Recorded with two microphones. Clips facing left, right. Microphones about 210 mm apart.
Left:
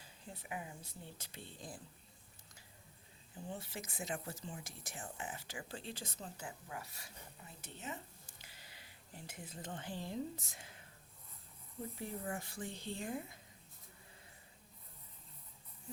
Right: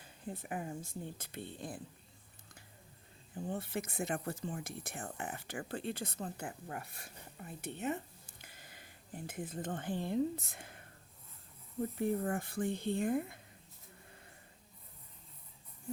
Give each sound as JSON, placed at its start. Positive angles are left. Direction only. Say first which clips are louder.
{"t": 0.0, "sound": "speech", "louder": "right 8 dB", "side_deg": -50}
{"t": 3.4, "sound": "speech", "louder": "right 7 dB", "side_deg": -55}
{"t": 11.9, "sound": "speech", "louder": "right 9 dB", "side_deg": -55}